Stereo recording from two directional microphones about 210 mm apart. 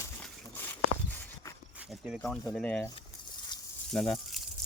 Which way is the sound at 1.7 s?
5° right (ahead or behind).